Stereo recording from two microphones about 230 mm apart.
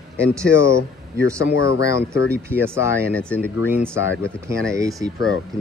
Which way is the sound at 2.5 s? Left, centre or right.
Centre.